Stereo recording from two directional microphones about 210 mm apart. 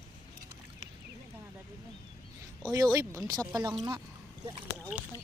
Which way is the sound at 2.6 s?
20° right (ahead or behind).